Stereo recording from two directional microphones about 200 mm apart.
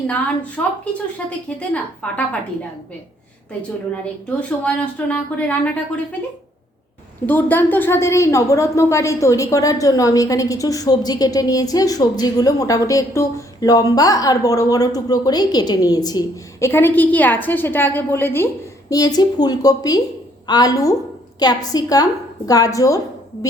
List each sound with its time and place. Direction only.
0.6 s a woman's voice: 5° left (ahead or behind)
4.4 s a woman's voice: 5° left (ahead or behind)
7.3 s a woman's voice: 10° left (ahead or behind)